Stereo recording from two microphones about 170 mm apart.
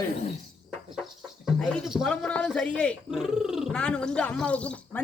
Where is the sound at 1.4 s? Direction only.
5° left (ahead or behind).